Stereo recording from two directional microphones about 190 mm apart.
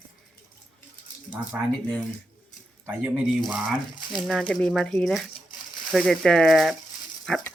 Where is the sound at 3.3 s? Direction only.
Centre (ahead or behind).